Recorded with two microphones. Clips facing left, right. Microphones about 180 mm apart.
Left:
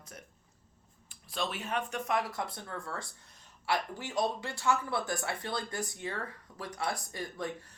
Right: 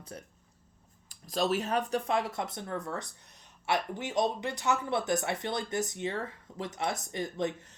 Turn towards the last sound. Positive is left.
turn(degrees=-20)  # may be behind; listen again after turning